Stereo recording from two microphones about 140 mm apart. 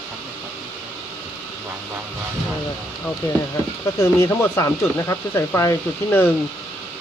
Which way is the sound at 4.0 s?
20° left (ahead or behind).